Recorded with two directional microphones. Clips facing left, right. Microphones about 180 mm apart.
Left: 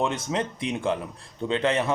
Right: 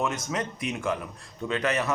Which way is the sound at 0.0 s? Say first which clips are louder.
Left 3 dB; 30° left (ahead or behind).